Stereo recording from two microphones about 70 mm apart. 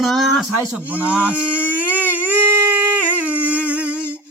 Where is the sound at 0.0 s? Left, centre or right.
Centre.